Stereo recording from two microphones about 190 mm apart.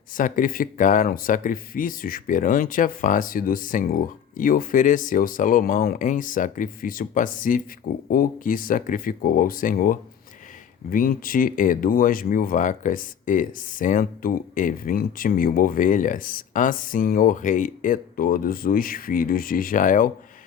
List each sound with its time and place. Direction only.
0.2 s speech: 45° left (ahead or behind)